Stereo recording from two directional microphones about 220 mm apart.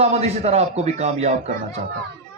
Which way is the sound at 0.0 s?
30° right (ahead or behind).